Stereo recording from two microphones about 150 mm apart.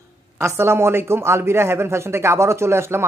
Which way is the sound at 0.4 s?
15° right (ahead or behind).